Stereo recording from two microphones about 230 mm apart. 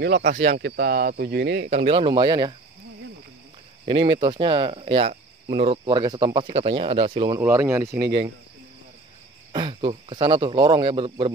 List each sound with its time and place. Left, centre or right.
0.0 s speech: right
1.8 s speech: right
3.8 s speech: right
9.5 s speech: right